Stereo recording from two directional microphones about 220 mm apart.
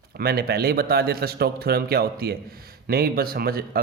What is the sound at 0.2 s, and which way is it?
A man's voice, 45° right (ahead or behind).